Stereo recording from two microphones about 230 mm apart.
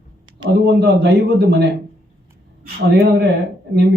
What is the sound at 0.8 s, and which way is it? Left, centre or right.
Speech, right.